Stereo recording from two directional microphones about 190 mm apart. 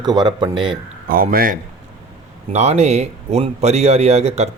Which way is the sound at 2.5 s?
35° right (ahead or behind).